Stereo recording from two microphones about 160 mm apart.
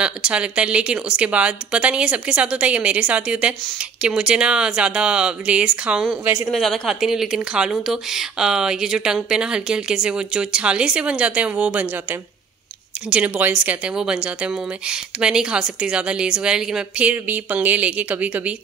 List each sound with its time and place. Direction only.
0.0 s speech: 5° right (ahead or behind)
6.5 s speech: centre (ahead or behind)